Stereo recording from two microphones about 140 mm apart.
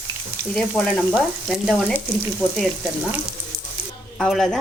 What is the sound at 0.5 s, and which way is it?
Frying, 10° left (ahead or behind).